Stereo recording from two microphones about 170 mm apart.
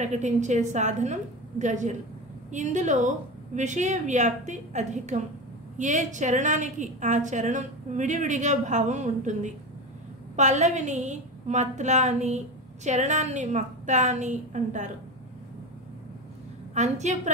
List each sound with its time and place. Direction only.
0.0 s a woman's voice: 45° right (ahead or behind)
16.7 s a woman's voice: 40° right (ahead or behind)